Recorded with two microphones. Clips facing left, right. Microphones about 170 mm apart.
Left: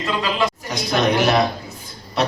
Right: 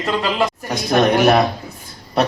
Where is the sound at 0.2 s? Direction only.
50° right (ahead or behind).